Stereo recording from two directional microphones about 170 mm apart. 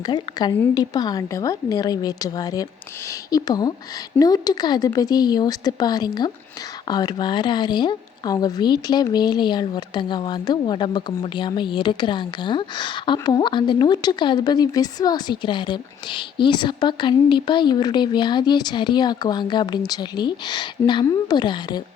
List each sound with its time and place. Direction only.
0.0 s speech: 25° left (ahead or behind)